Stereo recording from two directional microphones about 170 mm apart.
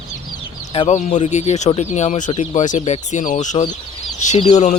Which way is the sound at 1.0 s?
45° left (ahead or behind).